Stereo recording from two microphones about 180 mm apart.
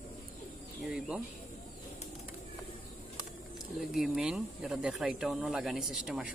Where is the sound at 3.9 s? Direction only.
Centre (ahead or behind).